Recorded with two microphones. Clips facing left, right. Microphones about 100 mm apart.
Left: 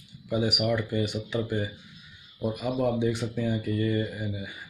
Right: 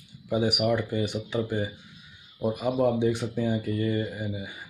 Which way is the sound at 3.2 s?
25° right (ahead or behind).